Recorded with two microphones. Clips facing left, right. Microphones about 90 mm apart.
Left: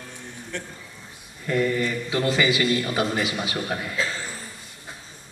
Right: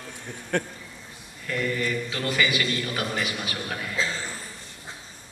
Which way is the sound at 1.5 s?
25° left (ahead or behind).